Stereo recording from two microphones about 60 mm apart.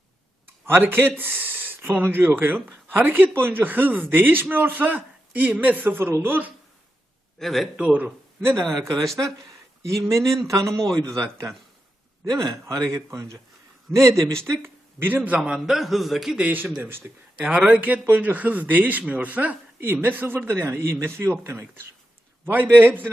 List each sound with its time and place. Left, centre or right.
0.6 s speech: right
7.3 s a man's voice: centre
7.8 s speech: centre
8.7 s a man's voice: right
9.1 s a sound: right
10.0 s a man's voice: right
10.8 s a man's voice: right
12.2 s a man's voice: right
14.4 s speech: right
15.4 s a man's voice: centre
16.4 s speech: right
16.8 s speech: right
17.3 s speech: centre; by 21.8 s right
22.4 s speech: right